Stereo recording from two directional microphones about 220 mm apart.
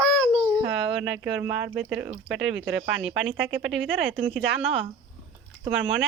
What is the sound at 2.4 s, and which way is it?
Speech, 55° right (ahead or behind).